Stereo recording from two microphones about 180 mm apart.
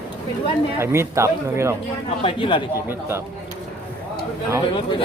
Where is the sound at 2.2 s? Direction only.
30° left (ahead or behind).